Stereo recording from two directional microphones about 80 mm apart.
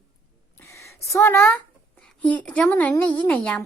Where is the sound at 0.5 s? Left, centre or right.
Left.